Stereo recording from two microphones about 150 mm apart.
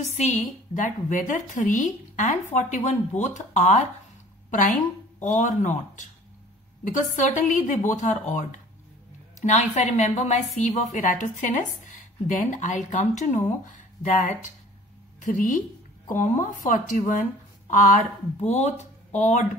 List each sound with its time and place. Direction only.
0.0 s a woman's voice: 50° left (ahead or behind)